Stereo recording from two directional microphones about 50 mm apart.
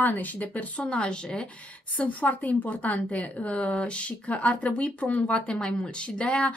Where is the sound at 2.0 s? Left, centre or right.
Left.